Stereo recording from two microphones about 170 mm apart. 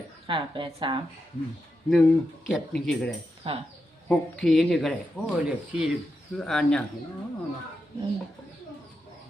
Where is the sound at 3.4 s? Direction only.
35° right (ahead or behind).